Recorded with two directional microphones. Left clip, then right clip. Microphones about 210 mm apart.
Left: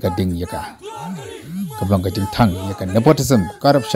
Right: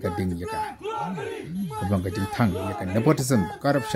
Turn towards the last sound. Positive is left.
turn(degrees=20)  # may be behind; listen again after turning